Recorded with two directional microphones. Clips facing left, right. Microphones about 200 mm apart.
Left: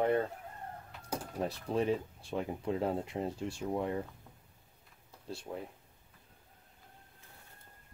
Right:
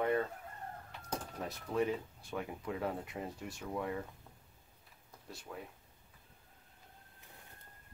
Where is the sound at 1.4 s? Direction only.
30° left (ahead or behind).